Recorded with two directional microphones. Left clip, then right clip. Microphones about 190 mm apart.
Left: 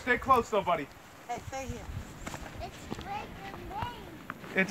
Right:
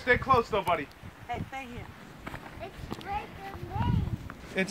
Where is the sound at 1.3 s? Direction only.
35° left (ahead or behind).